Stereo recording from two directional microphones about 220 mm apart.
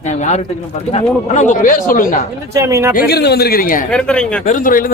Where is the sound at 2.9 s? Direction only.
45° left (ahead or behind).